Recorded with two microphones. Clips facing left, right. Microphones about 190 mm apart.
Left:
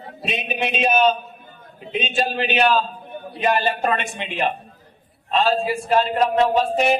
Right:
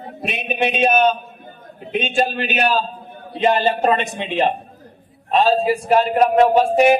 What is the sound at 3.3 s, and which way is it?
A man's voice, 25° right (ahead or behind).